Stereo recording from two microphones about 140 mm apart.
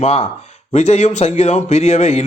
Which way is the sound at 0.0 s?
50° left (ahead or behind).